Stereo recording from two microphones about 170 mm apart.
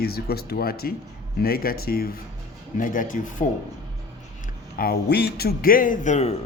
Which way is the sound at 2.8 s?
50° left (ahead or behind).